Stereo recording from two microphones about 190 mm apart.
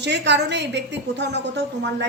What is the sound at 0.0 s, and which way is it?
A woman's voice, 65° right (ahead or behind).